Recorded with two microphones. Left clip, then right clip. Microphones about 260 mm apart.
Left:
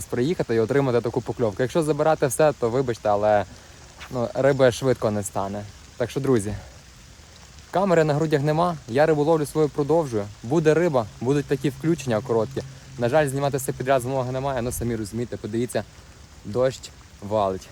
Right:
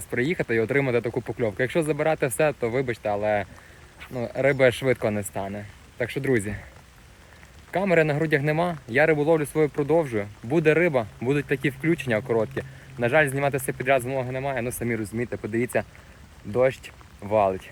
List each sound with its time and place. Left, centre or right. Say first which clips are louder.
0.1 s speech: left 1 dB; centre
7.7 s speech: left 2 dB; centre
9.5 s speech: left 1 dB; centre
14.8 s speech: even; centre